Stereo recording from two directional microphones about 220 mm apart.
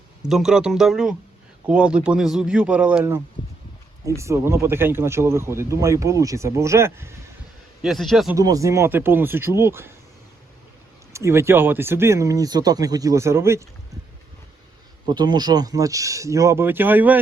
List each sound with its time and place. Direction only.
0.2 s speech: centre (ahead or behind)
7.8 s speech: centre (ahead or behind)
8.4 s speech: 15° right (ahead or behind)
11.1 s speech: 10° right (ahead or behind)
15.0 s speech: 20° right (ahead or behind)